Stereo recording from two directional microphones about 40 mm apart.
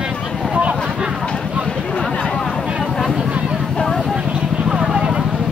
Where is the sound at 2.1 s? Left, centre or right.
Left.